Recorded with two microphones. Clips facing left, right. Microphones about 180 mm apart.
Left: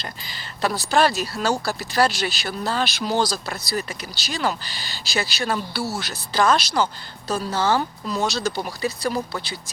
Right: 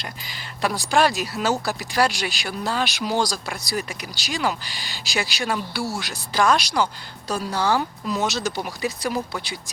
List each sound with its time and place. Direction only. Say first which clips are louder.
0.6 s speech: even; 15° right (ahead or behind)
7.5 s speech: even; 10° right (ahead or behind)
8.2 s speech: left 2 dB; 15° right (ahead or behind)